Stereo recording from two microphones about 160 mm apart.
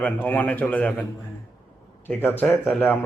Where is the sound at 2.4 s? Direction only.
10° left (ahead or behind).